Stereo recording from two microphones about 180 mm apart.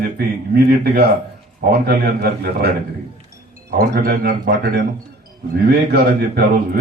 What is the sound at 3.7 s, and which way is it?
Speech, 60° right (ahead or behind).